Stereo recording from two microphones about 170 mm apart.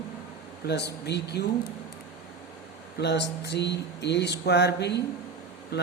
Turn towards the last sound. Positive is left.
turn(degrees=75)  # may be behind; listen again after turning